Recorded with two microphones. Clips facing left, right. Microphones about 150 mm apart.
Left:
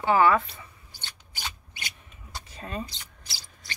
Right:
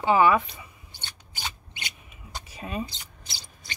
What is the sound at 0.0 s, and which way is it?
Speech, 15° right (ahead or behind).